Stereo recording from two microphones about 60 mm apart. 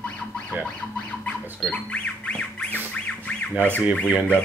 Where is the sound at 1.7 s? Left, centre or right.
Centre.